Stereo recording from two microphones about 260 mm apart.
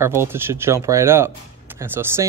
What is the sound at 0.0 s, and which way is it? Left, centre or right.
Speech, centre.